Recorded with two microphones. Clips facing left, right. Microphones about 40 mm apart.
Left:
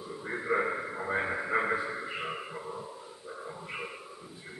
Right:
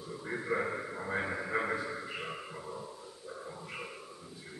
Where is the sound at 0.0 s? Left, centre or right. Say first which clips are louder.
Left 2 dB; centre.